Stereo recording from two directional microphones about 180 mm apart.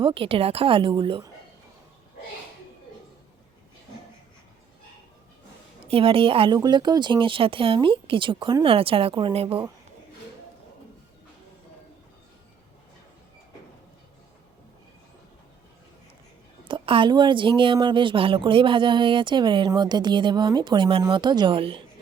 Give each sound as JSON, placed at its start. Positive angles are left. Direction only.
{"t": 0.0, "sound": "a woman's voice", "side_deg": -30}
{"t": 5.8, "sound": "a woman's voice", "side_deg": -30}
{"t": 16.6, "sound": "a woman's voice", "side_deg": -30}